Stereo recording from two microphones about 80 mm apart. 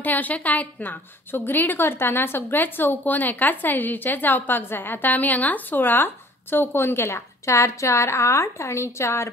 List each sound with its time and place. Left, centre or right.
0.0 s a woman's voice: left